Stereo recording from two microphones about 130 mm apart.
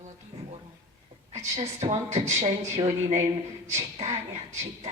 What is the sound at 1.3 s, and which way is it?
A woman's voice, 60° right (ahead or behind).